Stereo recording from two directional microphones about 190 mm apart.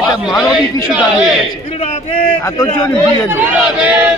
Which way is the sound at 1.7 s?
35° left (ahead or behind).